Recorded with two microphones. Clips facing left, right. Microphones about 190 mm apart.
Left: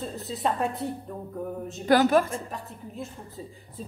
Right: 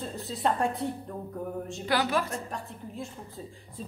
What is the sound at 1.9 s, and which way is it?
Speech, 45° left (ahead or behind).